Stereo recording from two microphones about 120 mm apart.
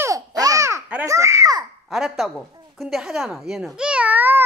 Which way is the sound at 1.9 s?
5° right (ahead or behind).